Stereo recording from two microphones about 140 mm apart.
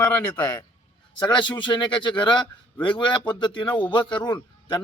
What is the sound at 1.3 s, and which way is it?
A man's voice, 35° left (ahead or behind).